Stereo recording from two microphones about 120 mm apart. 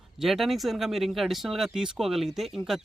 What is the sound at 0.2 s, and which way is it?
Speech, centre (ahead or behind).